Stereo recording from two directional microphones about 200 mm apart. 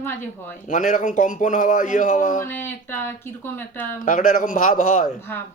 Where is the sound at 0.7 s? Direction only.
40° left (ahead or behind).